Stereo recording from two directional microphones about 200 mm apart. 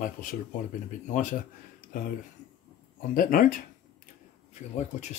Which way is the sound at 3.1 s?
45° left (ahead or behind).